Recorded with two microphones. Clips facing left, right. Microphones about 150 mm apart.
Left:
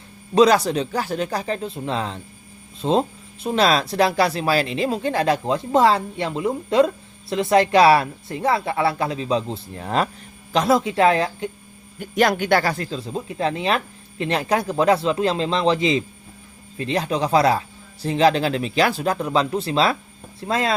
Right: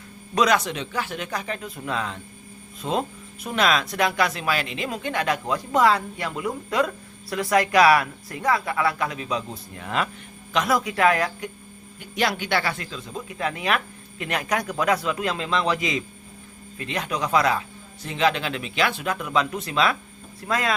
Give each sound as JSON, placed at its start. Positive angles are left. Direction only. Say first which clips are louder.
{"t": 0.3, "sound": "speech", "louder": "left 6 dB", "side_deg": 30}
{"t": 11.9, "sound": "speech", "louder": "left 6 dB", "side_deg": 45}